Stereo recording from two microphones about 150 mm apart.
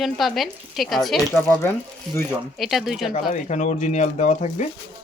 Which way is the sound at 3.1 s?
55° left (ahead or behind).